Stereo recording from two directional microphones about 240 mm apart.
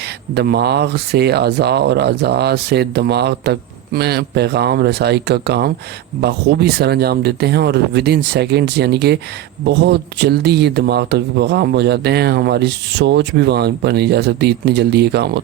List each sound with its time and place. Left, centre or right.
0.3 s speech: right